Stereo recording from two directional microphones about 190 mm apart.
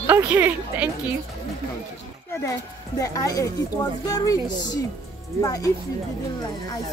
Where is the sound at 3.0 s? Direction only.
20° left (ahead or behind).